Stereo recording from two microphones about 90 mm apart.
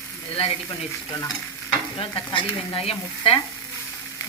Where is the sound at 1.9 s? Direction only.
65° left (ahead or behind); by 3.4 s 90° left.